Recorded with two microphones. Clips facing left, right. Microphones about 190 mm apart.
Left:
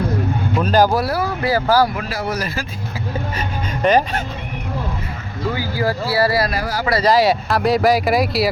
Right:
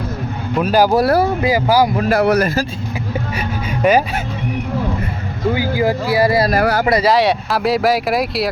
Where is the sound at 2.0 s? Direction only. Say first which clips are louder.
Right 10 dB; 60° right (ahead or behind).